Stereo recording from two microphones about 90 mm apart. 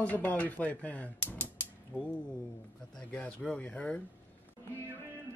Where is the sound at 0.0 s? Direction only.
20° left (ahead or behind).